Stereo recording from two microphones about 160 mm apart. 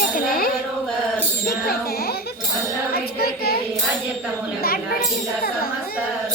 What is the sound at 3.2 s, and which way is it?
Child singing, 70° left (ahead or behind).